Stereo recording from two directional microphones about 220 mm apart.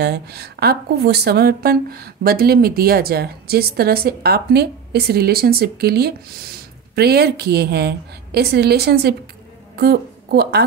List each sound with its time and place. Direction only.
0.0 s a woman's voice: 45° right (ahead or behind)